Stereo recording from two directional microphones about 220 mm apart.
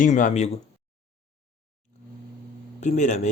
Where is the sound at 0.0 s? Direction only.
35° left (ahead or behind).